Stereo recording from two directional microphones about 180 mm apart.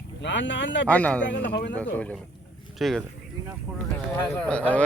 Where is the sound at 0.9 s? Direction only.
10° left (ahead or behind).